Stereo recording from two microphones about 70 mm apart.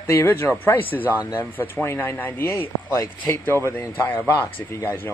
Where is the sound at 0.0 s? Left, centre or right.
Left.